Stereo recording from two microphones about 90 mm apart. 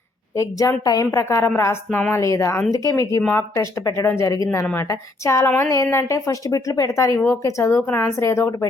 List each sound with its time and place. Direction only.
0.3 s speech: 35° left (ahead or behind)
1.9 s speech: 15° left (ahead or behind)
2.1 s speech: 35° left (ahead or behind)
4.9 s speech: 35° left (ahead or behind)